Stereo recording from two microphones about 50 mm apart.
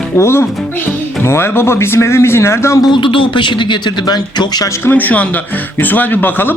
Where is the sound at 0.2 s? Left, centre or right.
Left.